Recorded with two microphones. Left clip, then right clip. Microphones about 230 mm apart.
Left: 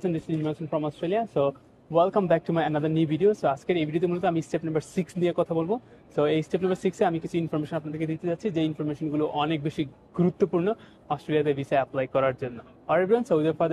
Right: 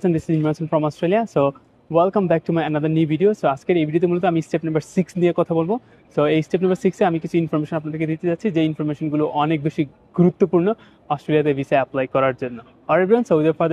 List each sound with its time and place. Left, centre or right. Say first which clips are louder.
0.0 s speech: right 8 dB; right
9.6 s speech: right 7 dB; right